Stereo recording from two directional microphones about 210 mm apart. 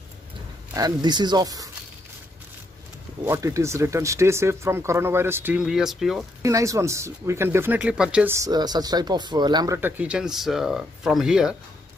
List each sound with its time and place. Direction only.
0.7 s speech: 20° right (ahead or behind)
3.3 s speech: 15° right (ahead or behind)
6.4 s speech: 15° right (ahead or behind)